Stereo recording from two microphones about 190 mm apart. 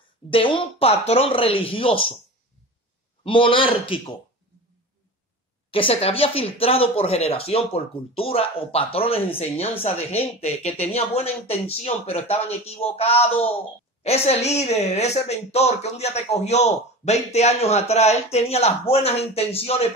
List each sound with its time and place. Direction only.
0.3 s speech: 25° left (ahead or behind)
3.3 s speech: 25° left (ahead or behind)
5.7 s speech: 30° left (ahead or behind)